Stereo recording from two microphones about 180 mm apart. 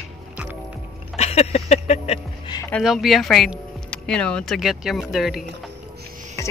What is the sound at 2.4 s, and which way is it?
Speech, 20° left (ahead or behind).